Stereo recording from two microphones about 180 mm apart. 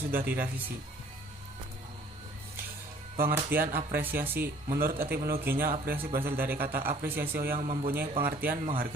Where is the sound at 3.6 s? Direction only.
55° right (ahead or behind).